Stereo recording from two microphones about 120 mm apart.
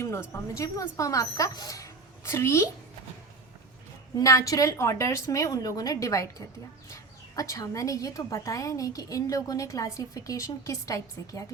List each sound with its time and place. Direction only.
0.0 s a woman's voice: 25° left (ahead or behind)
4.2 s speech: 25° left (ahead or behind)